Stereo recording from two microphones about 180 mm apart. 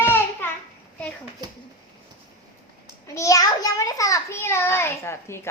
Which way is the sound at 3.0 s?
15° left (ahead or behind).